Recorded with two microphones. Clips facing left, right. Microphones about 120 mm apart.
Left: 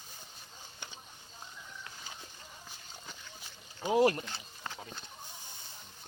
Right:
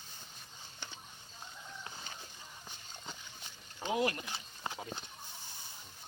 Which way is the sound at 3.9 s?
35° left (ahead or behind).